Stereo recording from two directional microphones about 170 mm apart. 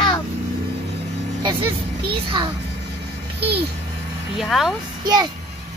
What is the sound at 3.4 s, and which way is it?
Speech, 75° right (ahead or behind).